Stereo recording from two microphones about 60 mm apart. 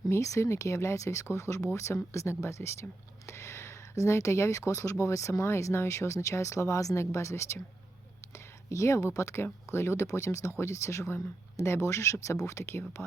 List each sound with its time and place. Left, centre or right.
0.1 s speech: left